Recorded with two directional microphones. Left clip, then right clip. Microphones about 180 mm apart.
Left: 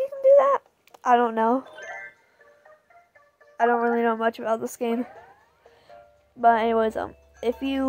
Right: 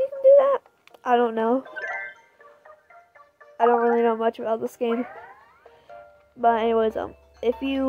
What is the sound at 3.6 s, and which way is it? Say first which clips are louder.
Speech: right 2 dB; 10° left (ahead or behind).